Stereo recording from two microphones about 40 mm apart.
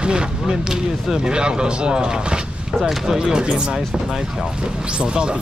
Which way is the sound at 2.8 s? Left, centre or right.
Centre.